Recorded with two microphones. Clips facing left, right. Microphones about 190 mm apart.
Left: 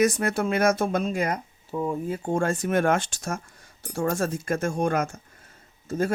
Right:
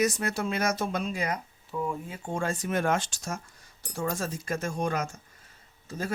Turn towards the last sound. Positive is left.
turn(degrees=50)  # may be behind; listen again after turning